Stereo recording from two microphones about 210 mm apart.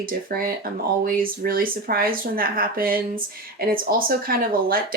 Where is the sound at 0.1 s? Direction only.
45° right (ahead or behind).